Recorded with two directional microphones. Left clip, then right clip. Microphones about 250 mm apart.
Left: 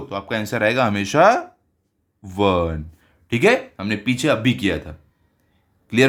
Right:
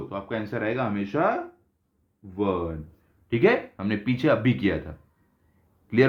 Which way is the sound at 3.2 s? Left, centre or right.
Left.